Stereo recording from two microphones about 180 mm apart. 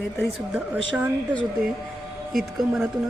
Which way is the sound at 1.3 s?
5° left (ahead or behind).